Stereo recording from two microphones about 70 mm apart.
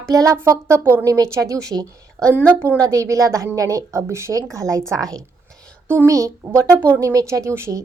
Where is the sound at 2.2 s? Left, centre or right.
Right.